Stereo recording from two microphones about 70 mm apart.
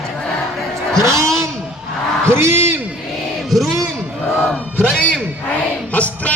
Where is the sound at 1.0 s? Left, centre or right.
Right.